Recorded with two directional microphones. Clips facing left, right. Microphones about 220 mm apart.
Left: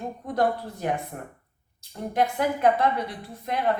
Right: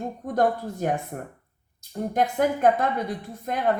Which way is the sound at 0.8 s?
45° right (ahead or behind).